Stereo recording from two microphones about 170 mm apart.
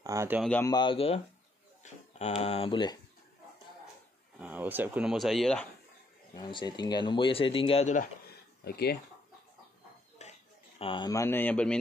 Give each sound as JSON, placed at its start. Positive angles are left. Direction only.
{"t": 0.0, "sound": "speech", "side_deg": -15}
{"t": 0.7, "sound": "speech", "side_deg": 25}
{"t": 4.4, "sound": "speech", "side_deg": -10}
{"t": 6.3, "sound": "speech", "side_deg": 25}
{"t": 8.6, "sound": "speech", "side_deg": 70}
{"t": 10.2, "sound": "a sound", "side_deg": 40}
{"t": 10.8, "sound": "speech", "side_deg": 30}